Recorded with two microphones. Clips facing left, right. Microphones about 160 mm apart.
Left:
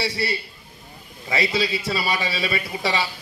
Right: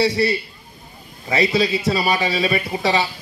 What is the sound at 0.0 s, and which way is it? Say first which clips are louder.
Speech: right 8 dB; 20° right (ahead or behind).